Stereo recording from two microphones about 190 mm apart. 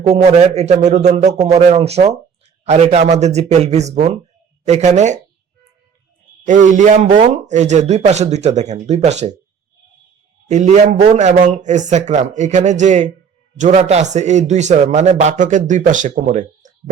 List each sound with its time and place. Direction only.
0.0 s speech: 35° right (ahead or behind)
6.4 s speech: 40° right (ahead or behind)
10.5 s speech: 40° right (ahead or behind)